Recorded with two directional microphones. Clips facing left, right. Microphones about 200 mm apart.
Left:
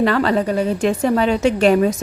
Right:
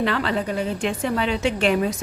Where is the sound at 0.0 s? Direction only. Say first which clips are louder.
Left 6 dB; 45° left (ahead or behind).